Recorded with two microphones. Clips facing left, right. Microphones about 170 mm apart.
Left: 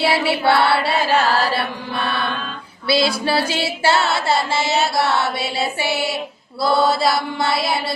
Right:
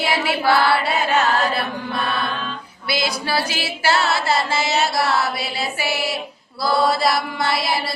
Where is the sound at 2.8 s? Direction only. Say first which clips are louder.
Left 5 dB; 30° left (ahead or behind).